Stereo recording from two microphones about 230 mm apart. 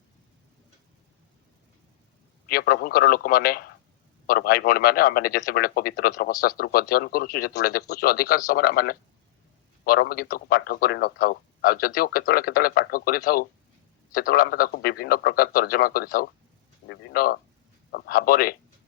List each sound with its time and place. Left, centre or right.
2.5 s speech: left